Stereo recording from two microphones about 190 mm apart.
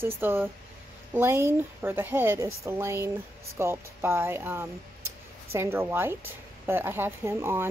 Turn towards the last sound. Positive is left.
turn(degrees=-10)  # may be behind; listen again after turning